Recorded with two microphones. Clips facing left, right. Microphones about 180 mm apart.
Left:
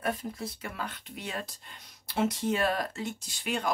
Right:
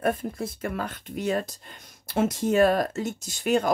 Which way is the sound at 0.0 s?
50° right (ahead or behind).